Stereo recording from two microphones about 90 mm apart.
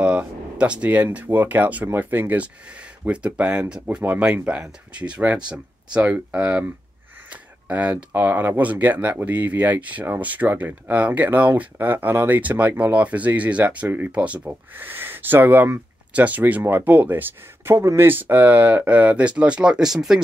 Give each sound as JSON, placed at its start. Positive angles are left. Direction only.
{"t": 0.0, "sound": "speech", "side_deg": -15}
{"t": 7.6, "sound": "speech", "side_deg": -15}